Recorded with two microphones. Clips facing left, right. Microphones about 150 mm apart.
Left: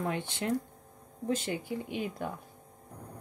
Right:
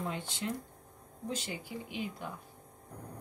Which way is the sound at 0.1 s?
60° left (ahead or behind).